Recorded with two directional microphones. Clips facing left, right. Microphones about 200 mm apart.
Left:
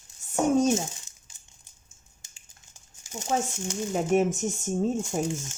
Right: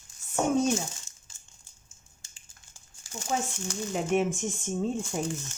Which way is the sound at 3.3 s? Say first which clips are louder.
Left 3 dB; 40° left (ahead or behind).